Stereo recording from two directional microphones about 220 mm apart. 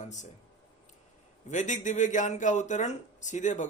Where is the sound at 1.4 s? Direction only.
35° left (ahead or behind).